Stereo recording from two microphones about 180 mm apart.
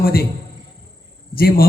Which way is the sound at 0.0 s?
60° left (ahead or behind).